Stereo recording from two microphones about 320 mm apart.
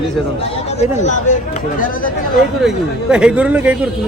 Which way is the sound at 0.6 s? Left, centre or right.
Left.